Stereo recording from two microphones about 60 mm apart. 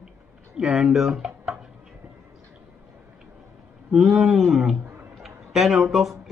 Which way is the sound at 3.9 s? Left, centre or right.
Centre.